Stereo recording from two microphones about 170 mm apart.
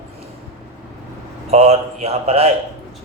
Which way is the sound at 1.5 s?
40° right (ahead or behind).